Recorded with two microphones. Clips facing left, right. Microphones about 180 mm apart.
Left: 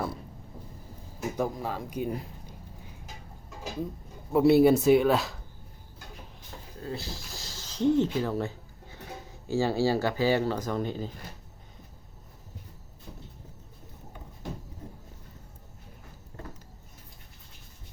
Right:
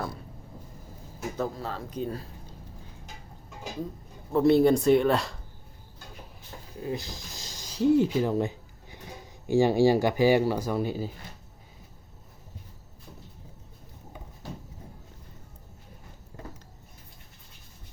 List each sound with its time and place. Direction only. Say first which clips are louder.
1.4 s speech: left 1 dB; 15° left (ahead or behind)
4.3 s speech: left 1 dB; 10° left (ahead or behind)
6.7 s speech: right 3 dB; 15° right (ahead or behind)